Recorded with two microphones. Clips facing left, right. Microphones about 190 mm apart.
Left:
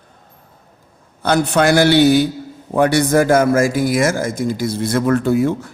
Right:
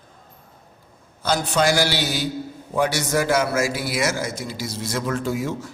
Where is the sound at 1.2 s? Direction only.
60° left (ahead or behind).